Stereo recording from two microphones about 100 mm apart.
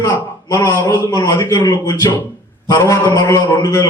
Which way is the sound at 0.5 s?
25° left (ahead or behind).